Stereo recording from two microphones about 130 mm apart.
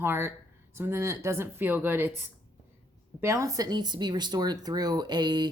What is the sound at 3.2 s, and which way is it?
A woman's voice, 20° right (ahead or behind).